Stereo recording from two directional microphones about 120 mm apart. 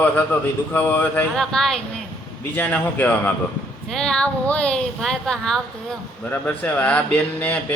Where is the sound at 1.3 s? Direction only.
5° left (ahead or behind).